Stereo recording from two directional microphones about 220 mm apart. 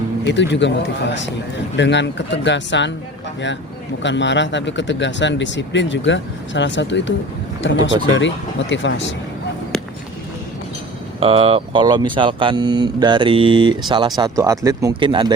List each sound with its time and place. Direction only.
0.3 s speech: 55° left (ahead or behind)
4.0 s speech: 55° left (ahead or behind)
11.2 s speech: 25° right (ahead or behind)